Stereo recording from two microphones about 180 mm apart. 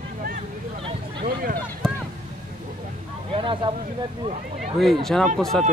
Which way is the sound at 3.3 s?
30° right (ahead or behind).